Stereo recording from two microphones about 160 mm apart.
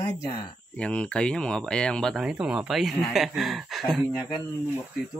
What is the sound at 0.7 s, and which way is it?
Speech, 5° left (ahead or behind).